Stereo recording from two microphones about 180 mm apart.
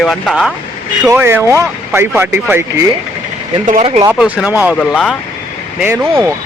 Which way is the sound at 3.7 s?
40° right (ahead or behind).